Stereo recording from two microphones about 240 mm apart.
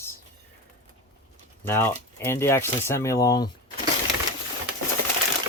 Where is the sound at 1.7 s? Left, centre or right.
Centre.